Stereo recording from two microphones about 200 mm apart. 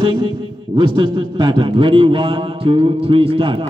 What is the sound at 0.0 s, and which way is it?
A man's voice, 25° right (ahead or behind).